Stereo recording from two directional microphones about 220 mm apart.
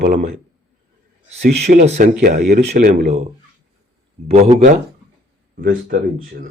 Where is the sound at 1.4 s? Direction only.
30° right (ahead or behind).